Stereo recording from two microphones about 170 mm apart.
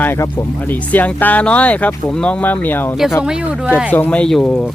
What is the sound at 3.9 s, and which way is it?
Speech, 10° left (ahead or behind).